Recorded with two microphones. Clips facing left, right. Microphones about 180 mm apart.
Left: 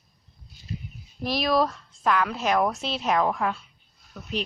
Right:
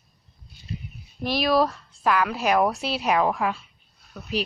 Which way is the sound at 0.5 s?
65° right (ahead or behind).